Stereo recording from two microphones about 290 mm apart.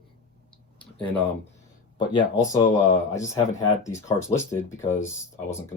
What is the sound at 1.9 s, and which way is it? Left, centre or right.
Speech, left.